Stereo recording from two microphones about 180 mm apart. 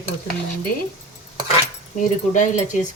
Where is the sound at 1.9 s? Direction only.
45° left (ahead or behind).